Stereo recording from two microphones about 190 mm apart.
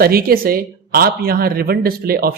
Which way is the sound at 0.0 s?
50° right (ahead or behind).